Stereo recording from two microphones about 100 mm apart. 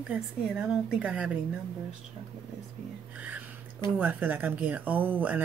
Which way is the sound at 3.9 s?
15° right (ahead or behind).